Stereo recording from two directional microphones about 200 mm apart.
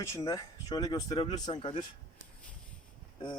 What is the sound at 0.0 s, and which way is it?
Speech, 15° left (ahead or behind).